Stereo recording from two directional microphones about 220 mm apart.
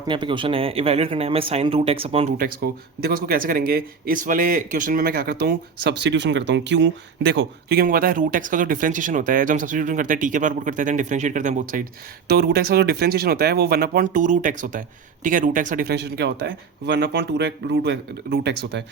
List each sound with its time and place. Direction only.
0.1 s speech: 20° right (ahead or behind)
2.4 s speech: 45° right (ahead or behind)